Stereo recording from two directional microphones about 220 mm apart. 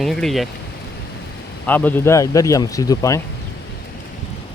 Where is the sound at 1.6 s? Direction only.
10° left (ahead or behind).